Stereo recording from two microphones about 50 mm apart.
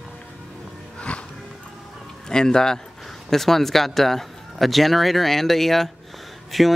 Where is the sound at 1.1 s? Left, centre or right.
Left.